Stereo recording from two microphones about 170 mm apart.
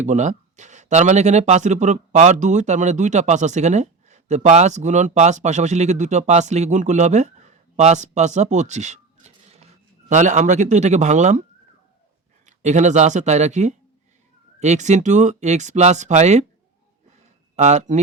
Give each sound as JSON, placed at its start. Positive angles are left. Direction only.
{"t": 0.0, "sound": "speech", "side_deg": -45}
{"t": 12.5, "sound": "speech", "side_deg": -45}
{"t": 17.6, "sound": "speech", "side_deg": -45}